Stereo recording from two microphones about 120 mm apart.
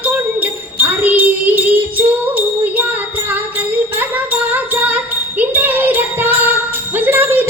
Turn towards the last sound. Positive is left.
turn(degrees=-15)  # may be behind; listen again after turning